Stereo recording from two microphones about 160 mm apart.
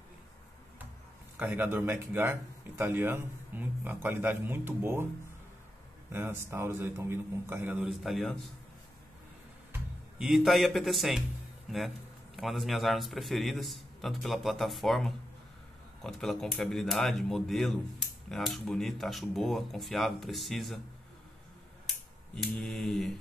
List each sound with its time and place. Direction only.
1.4 s speech: 15° right (ahead or behind)
6.1 s speech: 15° right (ahead or behind)
7.9 s a man's voice: centre (ahead or behind)
9.7 s a man's voice: 5° right (ahead or behind)
22.3 s a man's voice: 5° left (ahead or behind)